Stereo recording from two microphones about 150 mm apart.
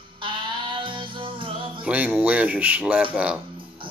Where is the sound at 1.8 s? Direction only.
10° right (ahead or behind).